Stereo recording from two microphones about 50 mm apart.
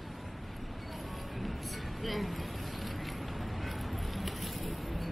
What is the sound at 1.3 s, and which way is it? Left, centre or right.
Music, centre.